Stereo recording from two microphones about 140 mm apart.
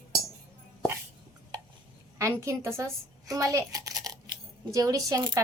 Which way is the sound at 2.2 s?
20° right (ahead or behind).